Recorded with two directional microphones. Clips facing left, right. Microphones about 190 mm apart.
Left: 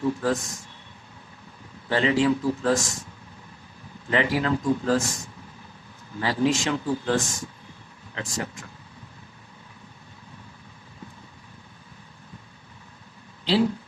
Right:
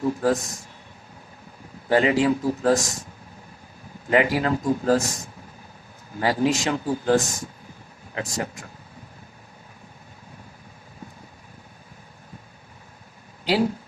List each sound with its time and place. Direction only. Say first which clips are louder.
0.0 s speech: right 2 dB; 40° right (ahead or behind)
1.9 s speech: right 2 dB; 45° right (ahead or behind)
4.1 s speech: right 3 dB; 45° right (ahead or behind)